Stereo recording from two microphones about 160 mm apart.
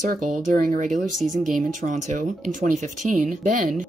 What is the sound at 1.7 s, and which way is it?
Speech, 50° right (ahead or behind).